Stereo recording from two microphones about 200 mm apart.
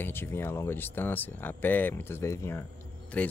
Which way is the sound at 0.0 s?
10° left (ahead or behind).